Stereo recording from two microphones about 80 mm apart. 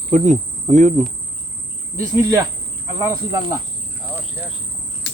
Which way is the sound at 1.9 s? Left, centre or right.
Right.